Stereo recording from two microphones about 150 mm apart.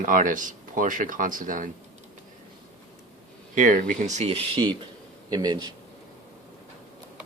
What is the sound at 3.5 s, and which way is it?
Speech, 65° right (ahead or behind).